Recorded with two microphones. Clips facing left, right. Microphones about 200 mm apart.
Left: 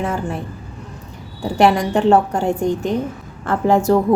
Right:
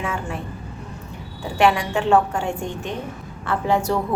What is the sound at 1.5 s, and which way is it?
A woman's voice, 40° left (ahead or behind).